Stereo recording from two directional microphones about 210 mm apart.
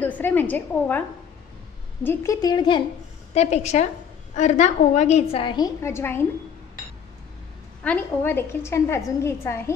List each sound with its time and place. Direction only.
0.0 s a woman's voice: 10° left (ahead or behind)
2.0 s a woman's voice: 15° left (ahead or behind)
3.3 s a woman's voice: 30° left (ahead or behind); by 6.2 s 10° left (ahead or behind)
7.8 s a woman's voice: 10° left (ahead or behind)